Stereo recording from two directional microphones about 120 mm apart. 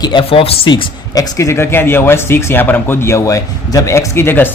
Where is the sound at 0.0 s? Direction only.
45° left (ahead or behind).